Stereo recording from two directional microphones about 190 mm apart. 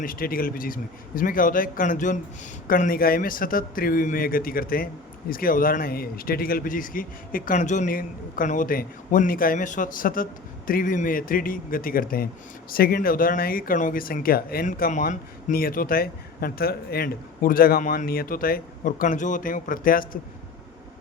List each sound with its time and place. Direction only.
0.0 s speech: 50° left (ahead or behind)